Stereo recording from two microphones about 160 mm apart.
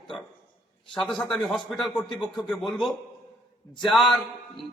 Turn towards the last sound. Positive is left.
turn(degrees=0)  # may be behind; listen again after turning